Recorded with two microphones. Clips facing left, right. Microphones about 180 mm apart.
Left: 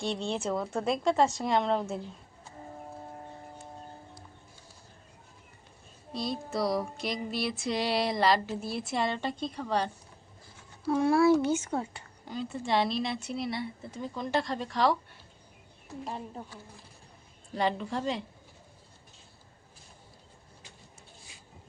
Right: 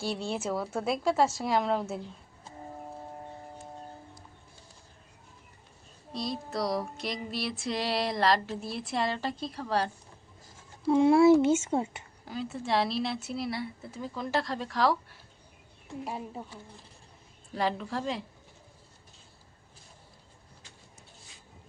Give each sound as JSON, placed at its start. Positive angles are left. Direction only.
{"t": 0.0, "sound": "music", "side_deg": -5}
{"t": 6.1, "sound": "music", "side_deg": 0}
{"t": 10.8, "sound": "speech", "side_deg": -25}
{"t": 12.2, "sound": "music", "side_deg": -5}
{"t": 16.0, "sound": "speech", "side_deg": -5}
{"t": 17.5, "sound": "music", "side_deg": 0}